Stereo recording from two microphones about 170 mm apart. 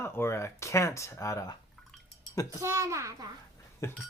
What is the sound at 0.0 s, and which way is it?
Speech, 15° left (ahead or behind).